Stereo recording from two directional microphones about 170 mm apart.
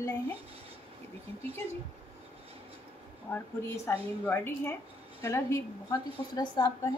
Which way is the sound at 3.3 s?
15° left (ahead or behind).